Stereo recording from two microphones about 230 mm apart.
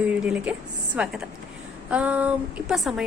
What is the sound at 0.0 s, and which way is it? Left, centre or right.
A woman's voice, centre.